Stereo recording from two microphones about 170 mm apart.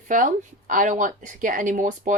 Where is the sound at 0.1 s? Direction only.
50° right (ahead or behind).